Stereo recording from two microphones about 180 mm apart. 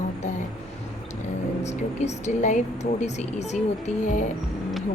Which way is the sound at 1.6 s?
40° left (ahead or behind).